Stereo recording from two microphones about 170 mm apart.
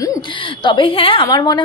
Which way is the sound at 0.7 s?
30° left (ahead or behind).